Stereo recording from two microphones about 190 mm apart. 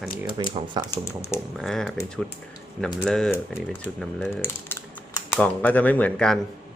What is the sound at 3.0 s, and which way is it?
Speech, centre (ahead or behind).